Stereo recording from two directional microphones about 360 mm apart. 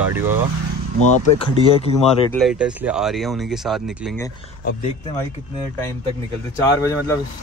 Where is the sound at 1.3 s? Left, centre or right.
Centre.